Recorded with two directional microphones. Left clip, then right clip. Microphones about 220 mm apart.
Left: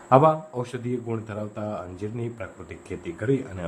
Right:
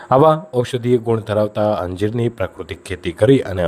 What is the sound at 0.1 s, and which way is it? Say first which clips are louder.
A man's voice: right 6 dB; 40° right (ahead or behind).